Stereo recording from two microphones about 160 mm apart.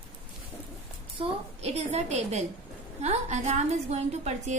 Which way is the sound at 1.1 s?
40° right (ahead or behind).